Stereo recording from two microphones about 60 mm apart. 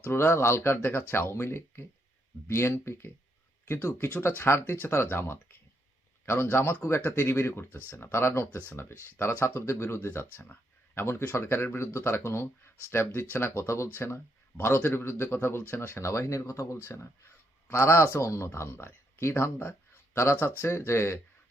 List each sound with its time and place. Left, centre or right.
0.1 s speech: left
16.8 s speech: left